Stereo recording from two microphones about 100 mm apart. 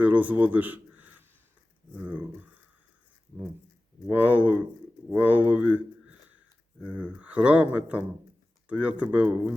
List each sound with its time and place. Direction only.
0.0 s speech: 15° right (ahead or behind)
4.1 s speech: 15° right (ahead or behind)
6.9 s speech: 15° right (ahead or behind)